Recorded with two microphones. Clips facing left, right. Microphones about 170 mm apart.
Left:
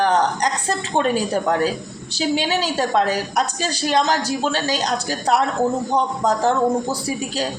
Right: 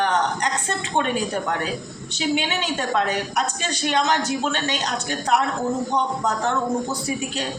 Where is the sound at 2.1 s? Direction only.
35° left (ahead or behind).